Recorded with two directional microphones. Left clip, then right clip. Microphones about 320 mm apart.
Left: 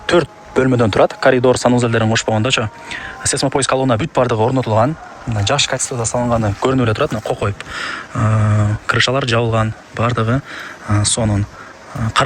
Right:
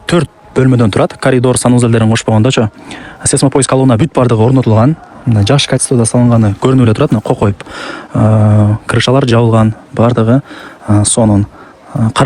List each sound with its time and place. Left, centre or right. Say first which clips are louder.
0.0 s speech: right 1 dB; right